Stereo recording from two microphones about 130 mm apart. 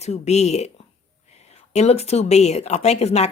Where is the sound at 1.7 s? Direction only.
55° left (ahead or behind).